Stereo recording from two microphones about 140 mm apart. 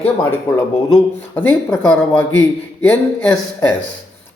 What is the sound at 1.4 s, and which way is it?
Speech, 10° left (ahead or behind).